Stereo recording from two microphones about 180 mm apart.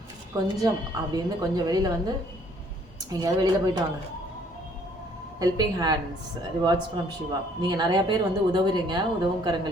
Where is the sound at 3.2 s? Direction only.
20° right (ahead or behind).